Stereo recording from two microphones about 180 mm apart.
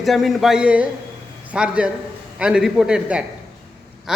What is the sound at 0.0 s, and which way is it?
A man's voice, centre (ahead or behind).